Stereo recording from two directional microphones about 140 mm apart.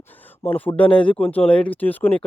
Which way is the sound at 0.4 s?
10° left (ahead or behind).